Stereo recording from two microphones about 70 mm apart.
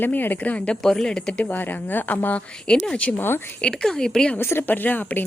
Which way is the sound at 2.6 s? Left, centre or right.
Centre.